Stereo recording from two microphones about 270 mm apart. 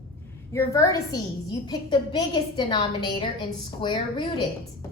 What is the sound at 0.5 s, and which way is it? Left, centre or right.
A woman's voice, centre.